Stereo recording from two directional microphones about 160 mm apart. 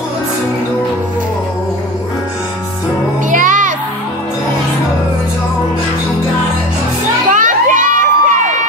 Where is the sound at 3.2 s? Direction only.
55° right (ahead or behind).